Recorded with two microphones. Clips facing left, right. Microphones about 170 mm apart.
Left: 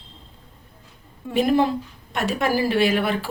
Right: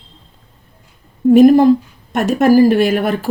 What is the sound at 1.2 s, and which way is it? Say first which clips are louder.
Speech: right 12 dB; 45° right (ahead or behind).